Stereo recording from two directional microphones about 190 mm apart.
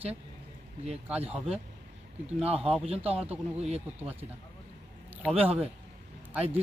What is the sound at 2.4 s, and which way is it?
Speech, 30° right (ahead or behind).